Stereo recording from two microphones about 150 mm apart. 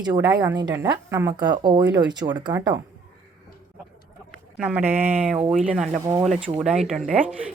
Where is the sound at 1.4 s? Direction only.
30° right (ahead or behind).